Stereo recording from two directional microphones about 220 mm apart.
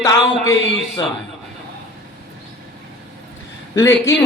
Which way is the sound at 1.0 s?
15° left (ahead or behind).